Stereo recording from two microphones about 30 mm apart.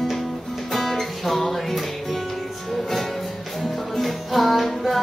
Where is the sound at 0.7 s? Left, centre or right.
Centre.